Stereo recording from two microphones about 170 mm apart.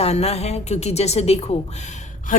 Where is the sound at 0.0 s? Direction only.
40° left (ahead or behind).